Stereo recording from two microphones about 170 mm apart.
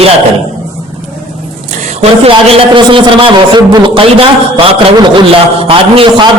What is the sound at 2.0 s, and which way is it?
A man's voice, 35° right (ahead or behind).